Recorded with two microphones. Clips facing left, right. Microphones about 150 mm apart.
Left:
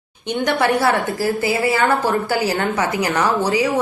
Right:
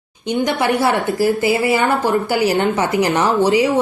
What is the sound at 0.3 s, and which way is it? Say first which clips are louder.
A woman's voice: right 1 dB; 20° right (ahead or behind).